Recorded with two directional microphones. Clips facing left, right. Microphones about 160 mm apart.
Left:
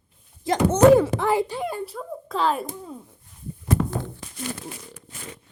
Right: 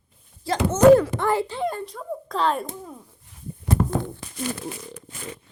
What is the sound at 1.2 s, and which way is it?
A child's voice, 10° left (ahead or behind).